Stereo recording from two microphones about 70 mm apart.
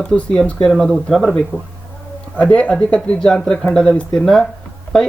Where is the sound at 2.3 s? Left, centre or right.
Centre.